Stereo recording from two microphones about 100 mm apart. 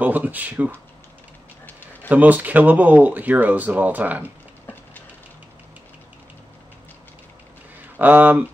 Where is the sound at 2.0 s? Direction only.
15° right (ahead or behind).